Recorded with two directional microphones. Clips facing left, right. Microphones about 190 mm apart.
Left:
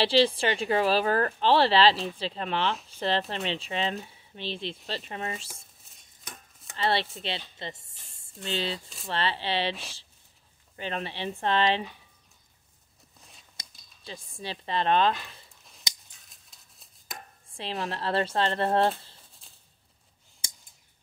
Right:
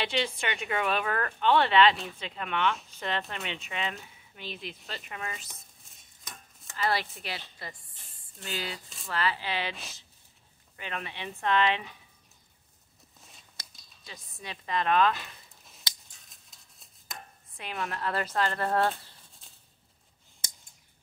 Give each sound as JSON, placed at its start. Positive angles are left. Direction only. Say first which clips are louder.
{"t": 0.0, "sound": "a woman's voice", "louder": "left 8 dB", "side_deg": 30}
{"t": 6.8, "sound": "speech", "louder": "left 3 dB", "side_deg": 30}
{"t": 10.8, "sound": "a woman's voice", "louder": "left 5 dB", "side_deg": 30}
{"t": 14.0, "sound": "speech", "louder": "left 6 dB", "side_deg": 30}
{"t": 16.3, "sound": "a sound", "louder": "even", "side_deg": 0}
{"t": 17.5, "sound": "speech", "louder": "left 3 dB", "side_deg": 30}
{"t": 19.4, "sound": "a sound", "louder": "even", "side_deg": 0}